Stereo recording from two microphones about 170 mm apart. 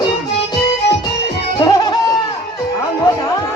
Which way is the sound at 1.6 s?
20° left (ahead or behind).